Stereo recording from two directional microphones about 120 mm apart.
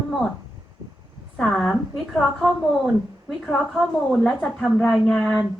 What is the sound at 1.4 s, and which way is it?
A woman's voice, 5° left (ahead or behind).